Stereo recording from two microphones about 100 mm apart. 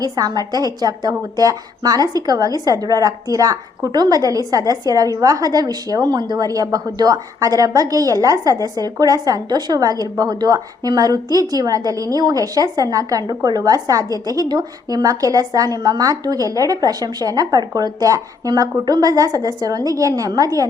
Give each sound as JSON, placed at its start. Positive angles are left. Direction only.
{"t": 0.0, "sound": "a woman's voice", "side_deg": -40}